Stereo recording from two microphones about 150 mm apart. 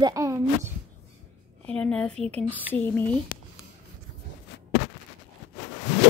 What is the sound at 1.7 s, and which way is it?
Speech, 5° left (ahead or behind).